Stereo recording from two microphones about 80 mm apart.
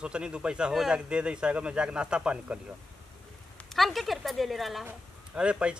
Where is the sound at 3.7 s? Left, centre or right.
Centre.